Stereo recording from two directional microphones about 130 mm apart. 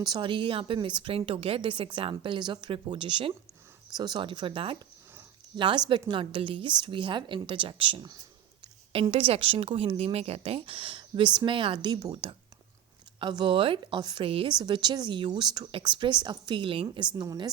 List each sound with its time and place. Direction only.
0.0 s a woman's voice: 35° right (ahead or behind)